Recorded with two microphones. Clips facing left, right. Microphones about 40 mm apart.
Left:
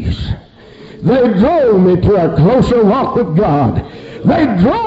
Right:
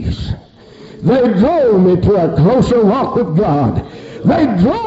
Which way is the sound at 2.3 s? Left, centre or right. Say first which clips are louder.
Left 1 dB; left.